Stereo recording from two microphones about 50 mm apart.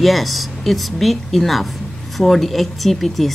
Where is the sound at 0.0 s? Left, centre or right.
Centre.